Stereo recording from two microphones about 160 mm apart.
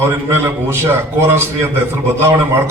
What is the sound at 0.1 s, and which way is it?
A man's voice, 15° right (ahead or behind).